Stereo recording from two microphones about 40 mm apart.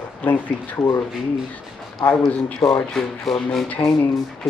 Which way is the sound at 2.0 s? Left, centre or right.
Left.